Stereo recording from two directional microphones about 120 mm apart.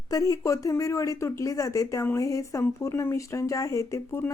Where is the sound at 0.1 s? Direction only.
30° left (ahead or behind).